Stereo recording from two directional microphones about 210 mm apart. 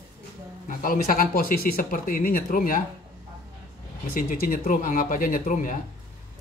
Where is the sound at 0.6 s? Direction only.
40° left (ahead or behind).